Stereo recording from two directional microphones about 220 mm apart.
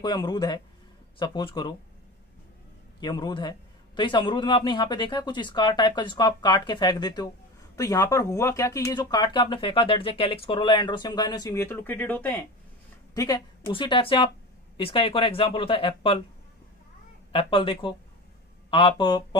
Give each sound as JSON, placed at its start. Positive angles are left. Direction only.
{"t": 0.0, "sound": "speech", "side_deg": 20}
{"t": 3.0, "sound": "speech", "side_deg": 20}
{"t": 17.3, "sound": "speech", "side_deg": 25}